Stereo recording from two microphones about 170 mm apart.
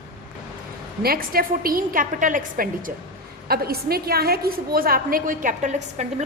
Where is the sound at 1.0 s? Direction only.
60° right (ahead or behind).